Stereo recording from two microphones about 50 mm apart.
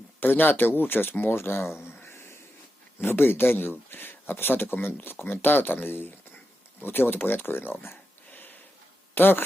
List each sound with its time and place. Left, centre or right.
0.2 s speech: left
2.0 s a sound: left
3.0 s speech: left